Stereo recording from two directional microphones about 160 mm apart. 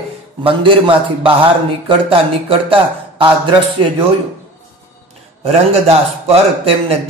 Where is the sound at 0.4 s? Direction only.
35° right (ahead or behind).